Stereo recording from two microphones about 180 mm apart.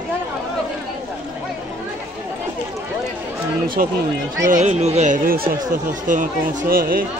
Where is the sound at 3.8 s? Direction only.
50° right (ahead or behind).